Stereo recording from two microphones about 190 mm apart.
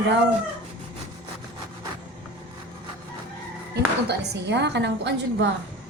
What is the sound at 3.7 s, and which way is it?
A woman's voice, 60° right (ahead or behind).